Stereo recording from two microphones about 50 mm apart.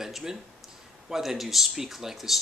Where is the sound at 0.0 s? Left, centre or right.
Centre.